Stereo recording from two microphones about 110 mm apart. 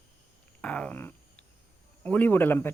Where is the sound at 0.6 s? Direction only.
10° left (ahead or behind).